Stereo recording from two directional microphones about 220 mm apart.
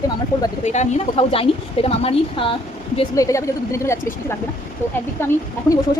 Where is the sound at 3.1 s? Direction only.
15° left (ahead or behind).